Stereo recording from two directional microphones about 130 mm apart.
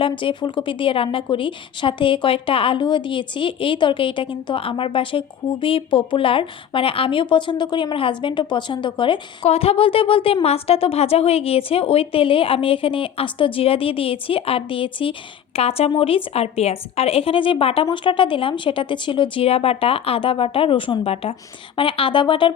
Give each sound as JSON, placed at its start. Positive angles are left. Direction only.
{"t": 0.0, "sound": "a woman's voice", "side_deg": 40}